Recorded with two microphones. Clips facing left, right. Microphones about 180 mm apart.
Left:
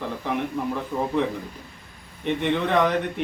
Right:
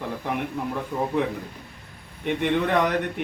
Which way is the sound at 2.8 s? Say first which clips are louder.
Left 1 dB; 10° right (ahead or behind).